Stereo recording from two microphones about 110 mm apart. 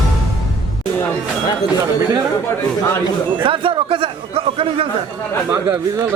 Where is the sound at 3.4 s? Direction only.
50° right (ahead or behind).